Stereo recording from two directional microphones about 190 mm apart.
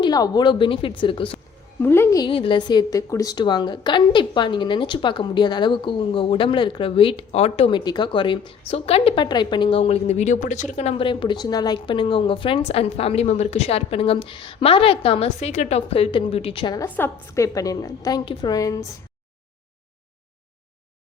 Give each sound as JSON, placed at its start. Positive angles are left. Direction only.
{"t": 0.0, "sound": "a woman's voice", "side_deg": 20}
{"t": 1.8, "sound": "a woman's voice", "side_deg": 10}
{"t": 16.8, "sound": "a woman's voice", "side_deg": 15}